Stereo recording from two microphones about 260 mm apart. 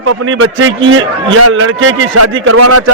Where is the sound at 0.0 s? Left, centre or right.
Right.